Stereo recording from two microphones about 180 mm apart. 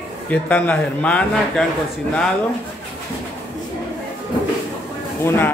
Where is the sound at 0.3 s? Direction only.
5° left (ahead or behind).